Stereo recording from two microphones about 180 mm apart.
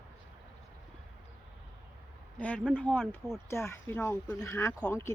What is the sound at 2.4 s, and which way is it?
Speech, 10° left (ahead or behind).